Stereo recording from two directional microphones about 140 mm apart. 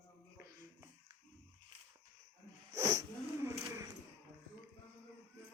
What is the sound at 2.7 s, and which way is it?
Sneeze, 25° right (ahead or behind).